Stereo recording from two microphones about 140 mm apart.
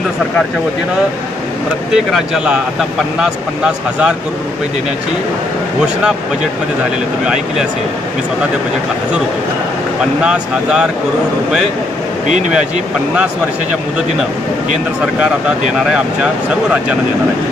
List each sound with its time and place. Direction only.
2.0 s speech: 5° right (ahead or behind)
10.2 s speech: 5° right (ahead or behind)
12.3 s speech: 60° right (ahead or behind)
15.8 s speech: 5° right (ahead or behind)